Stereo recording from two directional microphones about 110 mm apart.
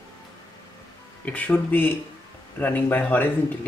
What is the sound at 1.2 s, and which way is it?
Speech, 15° left (ahead or behind).